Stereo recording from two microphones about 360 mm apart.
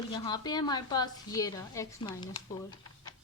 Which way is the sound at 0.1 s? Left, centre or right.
Centre.